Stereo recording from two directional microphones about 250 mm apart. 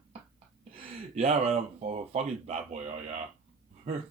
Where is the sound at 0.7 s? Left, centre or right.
Right.